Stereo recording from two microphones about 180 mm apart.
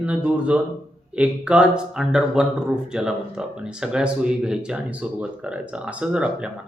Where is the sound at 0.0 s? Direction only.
5° right (ahead or behind).